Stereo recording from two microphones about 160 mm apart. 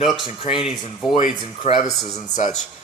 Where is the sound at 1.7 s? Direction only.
40° left (ahead or behind).